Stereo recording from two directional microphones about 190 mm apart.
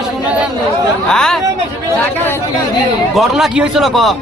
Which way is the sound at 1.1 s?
5° left (ahead or behind).